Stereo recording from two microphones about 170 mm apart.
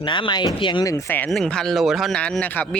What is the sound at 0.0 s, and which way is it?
Speech, 30° left (ahead or behind).